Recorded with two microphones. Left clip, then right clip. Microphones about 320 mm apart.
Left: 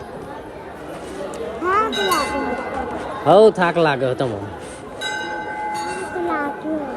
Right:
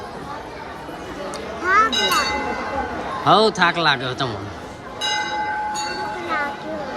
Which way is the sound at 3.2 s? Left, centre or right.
Centre.